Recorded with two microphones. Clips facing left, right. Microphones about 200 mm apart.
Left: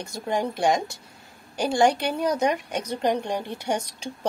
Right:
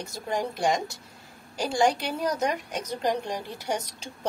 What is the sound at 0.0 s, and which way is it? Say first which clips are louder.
Speech: left 3 dB; centre (ahead or behind).